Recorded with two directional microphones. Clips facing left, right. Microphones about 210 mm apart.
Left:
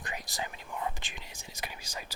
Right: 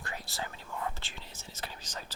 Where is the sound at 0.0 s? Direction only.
15° left (ahead or behind).